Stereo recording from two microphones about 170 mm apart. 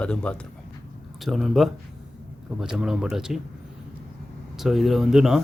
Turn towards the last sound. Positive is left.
turn(degrees=0)  # may be behind; listen again after turning